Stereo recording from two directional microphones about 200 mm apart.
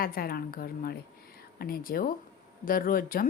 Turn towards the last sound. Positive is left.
turn(degrees=45)  # may be behind; listen again after turning